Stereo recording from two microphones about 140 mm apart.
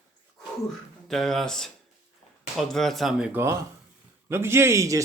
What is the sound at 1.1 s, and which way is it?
Speech, centre (ahead or behind).